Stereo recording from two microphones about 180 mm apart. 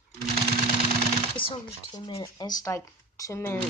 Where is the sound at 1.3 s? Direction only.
30° left (ahead or behind).